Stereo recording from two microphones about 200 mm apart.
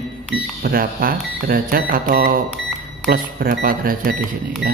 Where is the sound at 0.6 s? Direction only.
45° right (ahead or behind).